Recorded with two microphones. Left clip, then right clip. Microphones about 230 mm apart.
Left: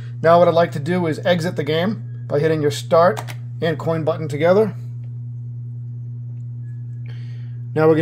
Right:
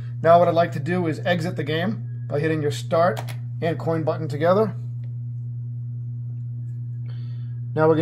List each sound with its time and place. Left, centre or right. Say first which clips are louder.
0.2 s speech: left 3 dB; left
7.7 s a man's voice: left 4 dB; left